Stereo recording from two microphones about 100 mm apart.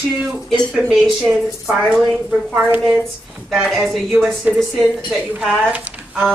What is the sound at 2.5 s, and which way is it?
Speech, 15° right (ahead or behind).